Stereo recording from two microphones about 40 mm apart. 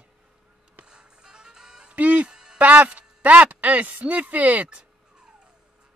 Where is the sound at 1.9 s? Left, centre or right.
Right.